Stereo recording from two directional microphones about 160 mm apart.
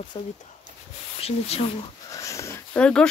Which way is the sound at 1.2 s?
40° left (ahead or behind).